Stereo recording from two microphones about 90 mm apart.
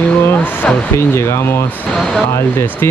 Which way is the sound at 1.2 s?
30° left (ahead or behind).